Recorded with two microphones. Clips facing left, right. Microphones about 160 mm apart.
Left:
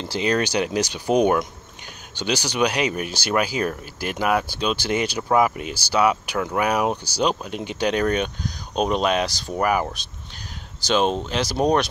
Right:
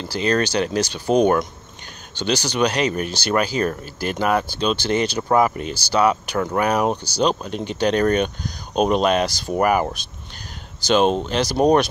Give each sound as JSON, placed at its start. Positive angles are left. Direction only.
{"t": 0.0, "sound": "speech", "side_deg": 20}